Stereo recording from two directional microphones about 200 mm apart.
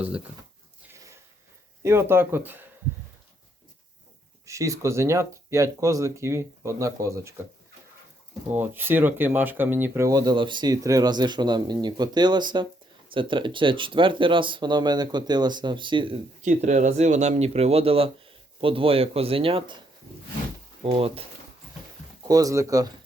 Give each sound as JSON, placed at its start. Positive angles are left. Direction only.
{"t": 1.8, "sound": "speech", "side_deg": -10}
{"t": 4.4, "sound": "speech", "side_deg": -15}
{"t": 8.4, "sound": "speech", "side_deg": -10}
{"t": 20.8, "sound": "speech", "side_deg": -30}
{"t": 22.2, "sound": "speech", "side_deg": -20}